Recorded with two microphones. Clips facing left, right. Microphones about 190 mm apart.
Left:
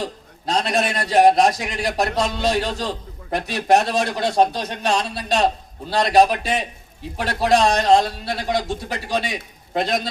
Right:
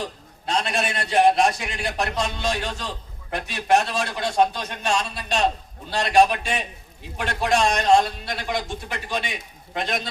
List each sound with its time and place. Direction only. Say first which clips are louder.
0.4 s a man's voice: left 4 dB; 40° left (ahead or behind)